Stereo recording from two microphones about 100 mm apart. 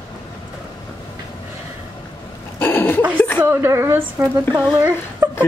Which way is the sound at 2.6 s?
20° left (ahead or behind).